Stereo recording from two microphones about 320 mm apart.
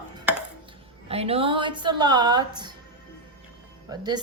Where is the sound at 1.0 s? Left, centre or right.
Centre.